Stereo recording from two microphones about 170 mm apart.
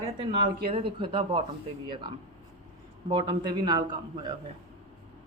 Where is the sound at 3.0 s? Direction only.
25° right (ahead or behind).